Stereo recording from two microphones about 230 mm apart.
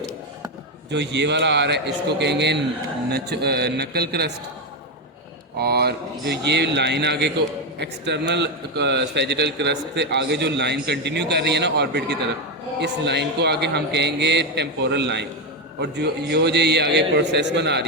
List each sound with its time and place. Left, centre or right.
0.9 s a man's voice: right
5.5 s a man's voice: right